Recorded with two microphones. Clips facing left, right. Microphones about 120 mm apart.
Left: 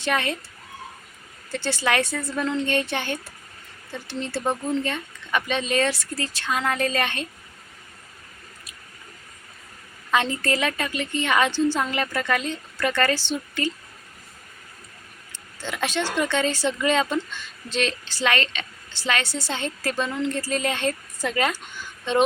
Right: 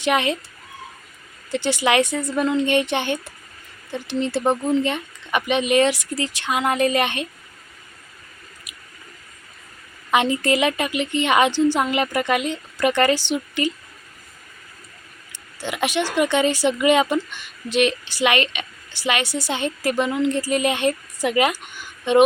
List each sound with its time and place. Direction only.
0.0 s a woman's voice: 20° right (ahead or behind)
1.5 s a woman's voice: 15° right (ahead or behind)
10.1 s speech: 15° right (ahead or behind)
15.3 s speech: 15° right (ahead or behind)